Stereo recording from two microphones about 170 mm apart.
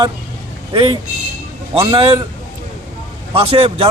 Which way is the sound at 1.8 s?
35° right (ahead or behind).